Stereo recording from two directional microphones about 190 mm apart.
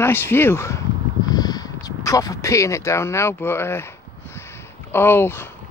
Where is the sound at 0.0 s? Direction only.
10° left (ahead or behind).